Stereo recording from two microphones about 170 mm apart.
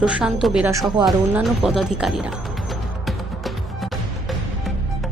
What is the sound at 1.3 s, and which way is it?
A woman's voice, 5° right (ahead or behind).